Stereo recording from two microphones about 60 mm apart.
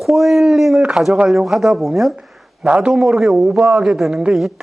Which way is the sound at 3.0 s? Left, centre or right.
Centre.